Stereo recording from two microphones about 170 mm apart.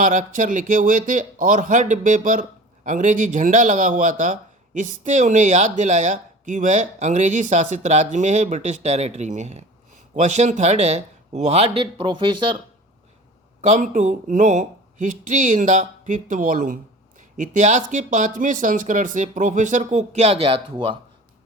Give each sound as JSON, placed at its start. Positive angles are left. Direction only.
{"t": 0.0, "sound": "speech", "side_deg": -50}
{"t": 13.6, "sound": "speech", "side_deg": -45}